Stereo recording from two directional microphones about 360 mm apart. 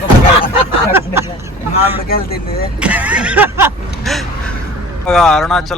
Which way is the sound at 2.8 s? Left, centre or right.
Centre.